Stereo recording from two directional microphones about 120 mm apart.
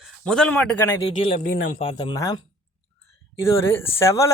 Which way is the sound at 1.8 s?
45° left (ahead or behind).